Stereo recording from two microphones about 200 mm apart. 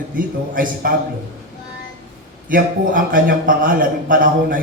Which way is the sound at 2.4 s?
45° right (ahead or behind).